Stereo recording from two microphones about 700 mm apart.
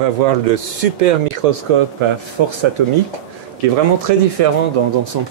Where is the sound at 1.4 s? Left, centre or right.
Right.